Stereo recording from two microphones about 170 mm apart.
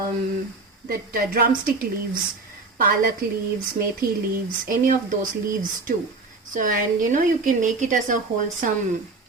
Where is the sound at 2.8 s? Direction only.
55° right (ahead or behind).